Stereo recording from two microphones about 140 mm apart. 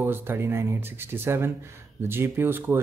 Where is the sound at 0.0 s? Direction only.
15° right (ahead or behind).